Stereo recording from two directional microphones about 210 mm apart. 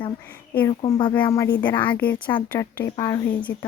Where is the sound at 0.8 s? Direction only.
20° left (ahead or behind).